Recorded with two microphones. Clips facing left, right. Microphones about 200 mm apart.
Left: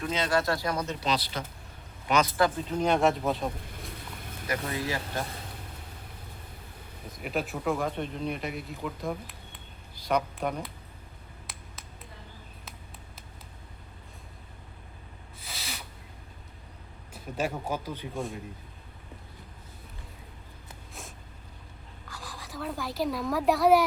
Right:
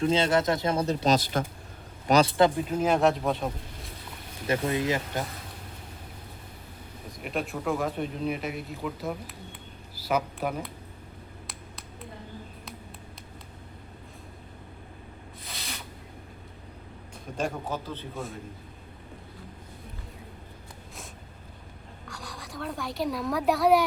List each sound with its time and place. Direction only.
0.0 s speech: 30° right (ahead or behind)
1.0 s speech: 45° right (ahead or behind)
2.0 s a man's voice: 35° right (ahead or behind)
2.6 s speech: 5° right (ahead or behind)
4.4 s speech: 20° right (ahead or behind)
7.2 s speech: centre (ahead or behind)
15.4 s a sound: centre (ahead or behind)
17.3 s speech: 5° left (ahead or behind)
22.0 s speech: centre (ahead or behind)